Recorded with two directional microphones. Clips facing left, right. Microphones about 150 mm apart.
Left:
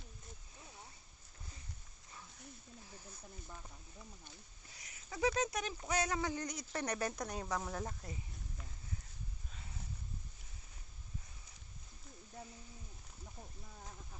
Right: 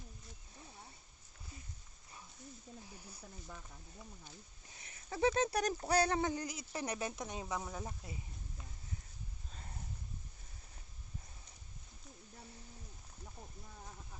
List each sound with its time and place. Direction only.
4.7 s speech: 30° right (ahead or behind)
6.3 s speech: 10° right (ahead or behind)
9.5 s a sound: 40° right (ahead or behind)